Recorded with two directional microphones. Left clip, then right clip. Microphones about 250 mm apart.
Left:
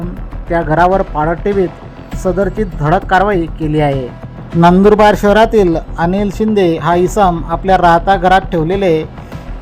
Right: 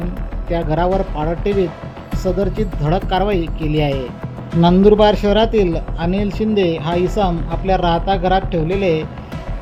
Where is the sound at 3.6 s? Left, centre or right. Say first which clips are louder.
Left 6 dB; left.